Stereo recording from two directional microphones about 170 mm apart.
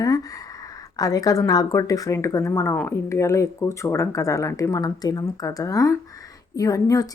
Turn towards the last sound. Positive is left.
turn(degrees=20)  # may be behind; listen again after turning